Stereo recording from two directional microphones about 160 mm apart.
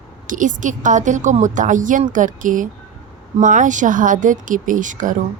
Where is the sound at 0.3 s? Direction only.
55° right (ahead or behind).